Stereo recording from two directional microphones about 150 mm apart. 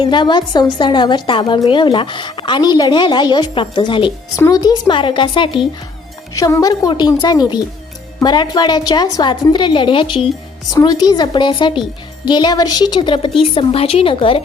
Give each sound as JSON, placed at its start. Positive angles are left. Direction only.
{"t": 0.0, "sound": "a woman's voice", "side_deg": 30}